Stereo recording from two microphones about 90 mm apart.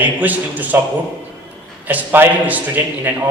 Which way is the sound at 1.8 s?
20° right (ahead or behind).